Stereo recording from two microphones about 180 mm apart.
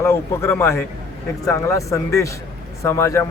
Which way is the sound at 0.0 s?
15° left (ahead or behind).